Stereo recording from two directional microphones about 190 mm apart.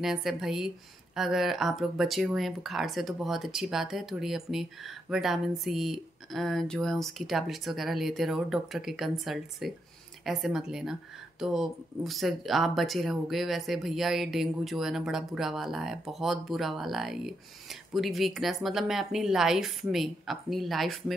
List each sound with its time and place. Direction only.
0.0 s speech: centre (ahead or behind)